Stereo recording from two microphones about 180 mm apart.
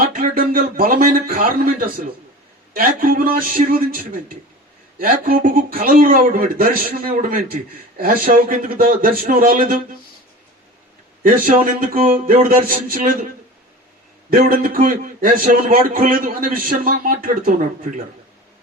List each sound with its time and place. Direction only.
0.1 s a man's voice: 50° right (ahead or behind)
11.2 s speech: 50° right (ahead or behind)
14.3 s speech: 50° right (ahead or behind)